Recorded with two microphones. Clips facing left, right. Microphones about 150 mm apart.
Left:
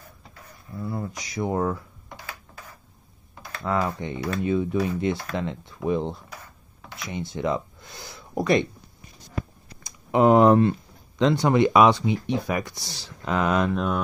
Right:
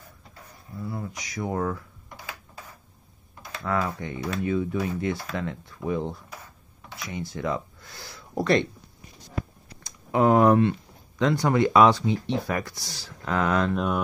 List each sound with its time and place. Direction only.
1.1 s speech: 25° left (ahead or behind)
3.6 s speech: 25° left (ahead or behind)
10.1 s a sound: 20° left (ahead or behind)
11.1 s speech: 25° left (ahead or behind)
13.7 s mantra: centre (ahead or behind)